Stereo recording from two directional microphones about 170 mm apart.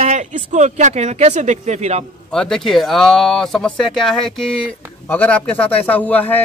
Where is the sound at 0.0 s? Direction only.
45° right (ahead or behind).